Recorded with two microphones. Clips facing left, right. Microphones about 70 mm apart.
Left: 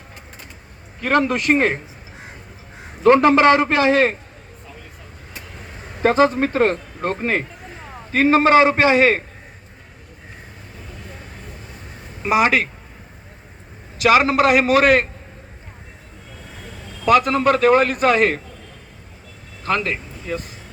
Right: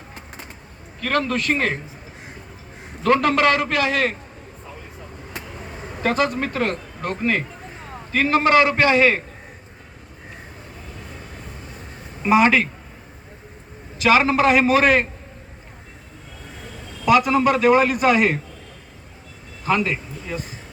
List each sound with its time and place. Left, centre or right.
1.0 s a man's voice: left
3.0 s a man's voice: left
6.0 s a man's voice: left
12.2 s speech: centre
14.0 s a man's voice: centre
17.1 s a man's voice: centre
19.6 s speech: centre